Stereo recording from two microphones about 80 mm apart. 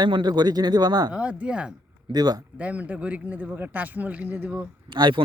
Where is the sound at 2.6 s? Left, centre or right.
Centre.